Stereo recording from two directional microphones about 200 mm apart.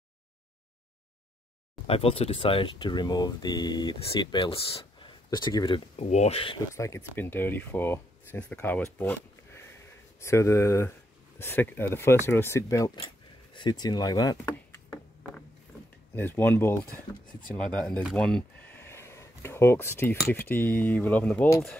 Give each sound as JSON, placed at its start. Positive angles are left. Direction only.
{"t": 1.9, "sound": "speech", "side_deg": 30}
{"t": 6.0, "sound": "speech", "side_deg": 35}
{"t": 6.7, "sound": "speech", "side_deg": 15}
{"t": 8.9, "sound": "a sound", "side_deg": 10}
{"t": 10.2, "sound": "speech", "side_deg": 15}
{"t": 13.5, "sound": "a sound", "side_deg": 20}
{"t": 16.2, "sound": "speech", "side_deg": 10}
{"t": 18.1, "sound": "speech", "side_deg": 5}